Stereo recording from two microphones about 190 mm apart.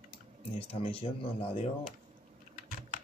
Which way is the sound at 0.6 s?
30° left (ahead or behind).